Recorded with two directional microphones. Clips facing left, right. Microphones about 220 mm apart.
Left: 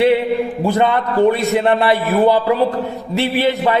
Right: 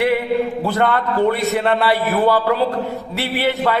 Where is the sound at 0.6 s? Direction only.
15° left (ahead or behind).